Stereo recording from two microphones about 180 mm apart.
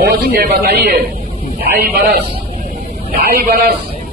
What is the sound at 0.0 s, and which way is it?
Speech, 60° right (ahead or behind).